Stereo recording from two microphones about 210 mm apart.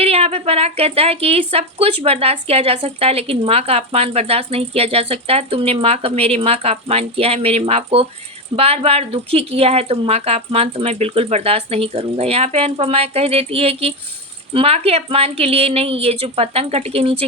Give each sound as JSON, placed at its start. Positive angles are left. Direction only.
{"t": 0.0, "sound": "a woman's voice", "side_deg": -30}